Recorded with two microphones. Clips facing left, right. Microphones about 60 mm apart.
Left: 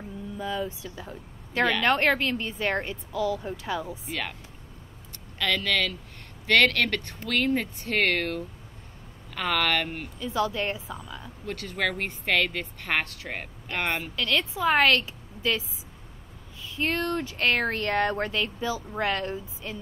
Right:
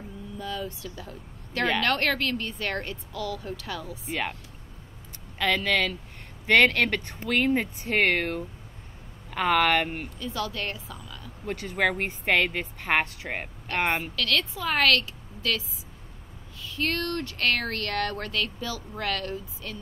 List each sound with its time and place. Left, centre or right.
0.4 s speech: centre
4.1 s speech: centre
5.4 s speech: centre
10.1 s speech: centre
11.4 s speech: centre
14.1 s speech: centre
16.6 s speech: centre